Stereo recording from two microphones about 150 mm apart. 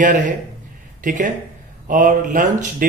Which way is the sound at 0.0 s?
60° right (ahead or behind).